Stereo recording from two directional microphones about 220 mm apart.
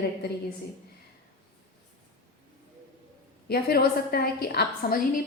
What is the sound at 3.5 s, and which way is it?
A woman's voice, 45° left (ahead or behind).